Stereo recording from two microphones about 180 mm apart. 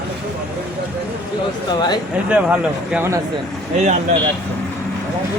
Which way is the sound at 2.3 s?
10° right (ahead or behind).